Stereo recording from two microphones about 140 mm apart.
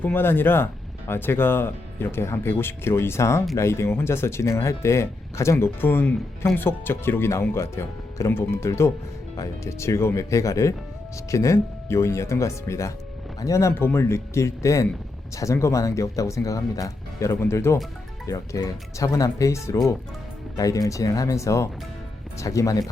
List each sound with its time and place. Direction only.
0.0 s speech: 15° left (ahead or behind)